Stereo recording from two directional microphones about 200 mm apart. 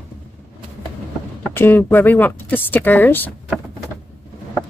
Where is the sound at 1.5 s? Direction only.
10° left (ahead or behind).